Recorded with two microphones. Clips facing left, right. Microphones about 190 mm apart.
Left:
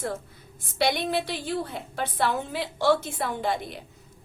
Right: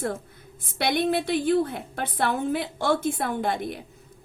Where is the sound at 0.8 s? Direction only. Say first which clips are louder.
Right 2 dB; 55° right (ahead or behind).